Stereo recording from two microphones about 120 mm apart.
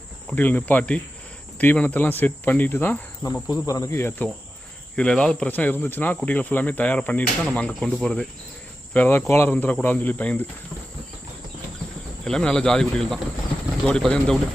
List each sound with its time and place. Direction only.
0.3 s speech: 15° left (ahead or behind)
3.5 s cricket: 30° left (ahead or behind)
4.9 s speech: 10° left (ahead or behind)
12.2 s speech: 5° left (ahead or behind)